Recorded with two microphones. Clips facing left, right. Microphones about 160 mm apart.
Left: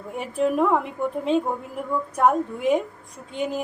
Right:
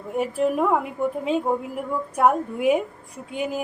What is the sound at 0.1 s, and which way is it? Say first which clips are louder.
A woman's voice: right 1 dB; 5° right (ahead or behind).